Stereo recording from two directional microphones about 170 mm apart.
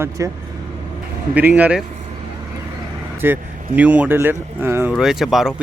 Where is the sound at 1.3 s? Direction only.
10° right (ahead or behind).